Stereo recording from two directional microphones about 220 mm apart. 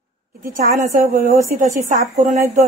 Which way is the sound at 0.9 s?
40° right (ahead or behind).